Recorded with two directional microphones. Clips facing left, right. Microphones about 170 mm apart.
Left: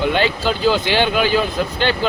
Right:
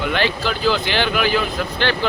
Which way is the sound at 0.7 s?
25° left (ahead or behind).